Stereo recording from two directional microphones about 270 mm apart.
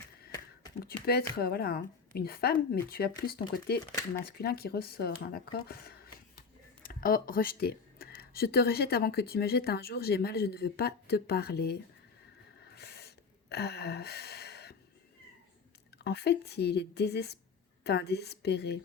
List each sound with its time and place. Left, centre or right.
0.8 s speech: left
12.6 s a sound: left
16.0 s speech: left